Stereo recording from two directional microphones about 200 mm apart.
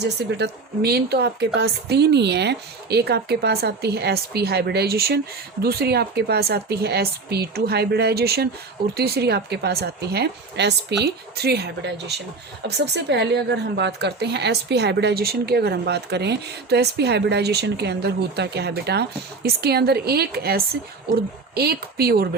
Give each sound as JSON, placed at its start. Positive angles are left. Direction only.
{"t": 0.0, "sound": "a woman's voice", "side_deg": -55}